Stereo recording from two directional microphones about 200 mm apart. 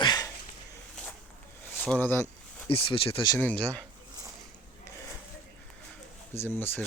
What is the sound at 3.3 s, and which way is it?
Speech, 5° left (ahead or behind).